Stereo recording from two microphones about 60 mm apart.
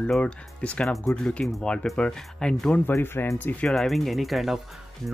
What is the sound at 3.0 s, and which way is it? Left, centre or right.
Speech, left.